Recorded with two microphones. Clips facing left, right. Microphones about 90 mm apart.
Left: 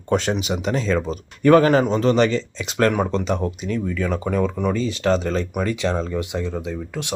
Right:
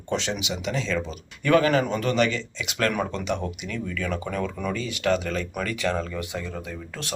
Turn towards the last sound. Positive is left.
turn(degrees=20)  # may be behind; listen again after turning